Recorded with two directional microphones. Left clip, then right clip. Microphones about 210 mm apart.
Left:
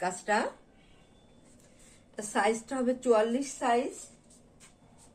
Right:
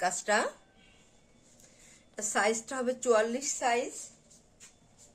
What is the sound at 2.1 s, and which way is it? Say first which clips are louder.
Speech: even; 35° right (ahead or behind).